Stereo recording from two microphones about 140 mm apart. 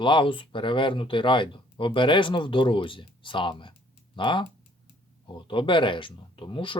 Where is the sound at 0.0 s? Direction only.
35° left (ahead or behind).